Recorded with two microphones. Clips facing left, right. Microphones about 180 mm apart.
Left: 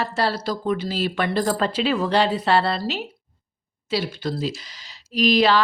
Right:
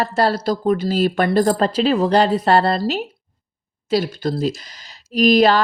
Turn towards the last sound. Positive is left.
turn(degrees=-45)  # may be behind; listen again after turning